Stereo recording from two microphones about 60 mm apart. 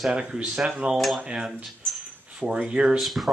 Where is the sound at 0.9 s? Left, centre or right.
Centre.